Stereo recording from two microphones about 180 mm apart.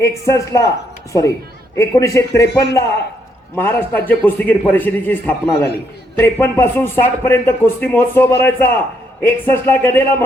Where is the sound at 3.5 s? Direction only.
10° left (ahead or behind).